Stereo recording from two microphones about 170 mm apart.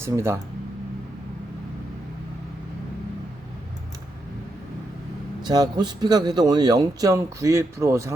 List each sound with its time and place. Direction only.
0.0 s speech: 15° right (ahead or behind)
5.4 s a man's voice: 25° right (ahead or behind)